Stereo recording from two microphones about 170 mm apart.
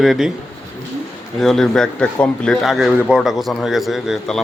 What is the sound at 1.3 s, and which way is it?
A man's voice, centre (ahead or behind).